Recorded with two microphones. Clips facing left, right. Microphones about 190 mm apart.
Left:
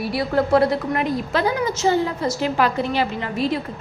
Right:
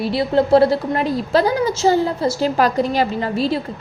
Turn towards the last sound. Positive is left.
turn(degrees=-30)  # may be behind; listen again after turning